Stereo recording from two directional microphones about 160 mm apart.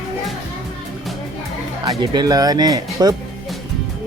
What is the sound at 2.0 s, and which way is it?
Speech, 25° right (ahead or behind).